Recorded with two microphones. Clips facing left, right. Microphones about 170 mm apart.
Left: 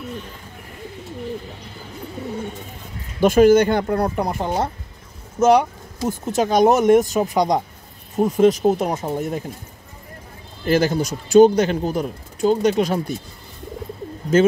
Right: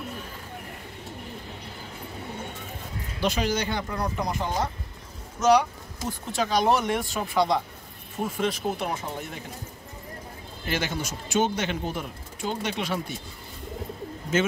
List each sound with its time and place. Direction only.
3.2 s speech: 50° left (ahead or behind)
10.6 s speech: 40° left (ahead or behind)
14.3 s speech: 35° left (ahead or behind)